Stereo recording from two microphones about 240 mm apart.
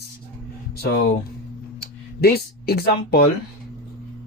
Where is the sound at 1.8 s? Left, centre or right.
Left.